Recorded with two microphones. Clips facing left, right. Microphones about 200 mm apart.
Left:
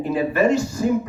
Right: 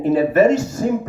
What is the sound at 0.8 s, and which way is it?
Music, 35° right (ahead or behind).